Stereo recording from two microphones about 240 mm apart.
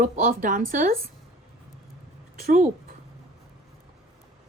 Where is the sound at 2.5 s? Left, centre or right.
Right.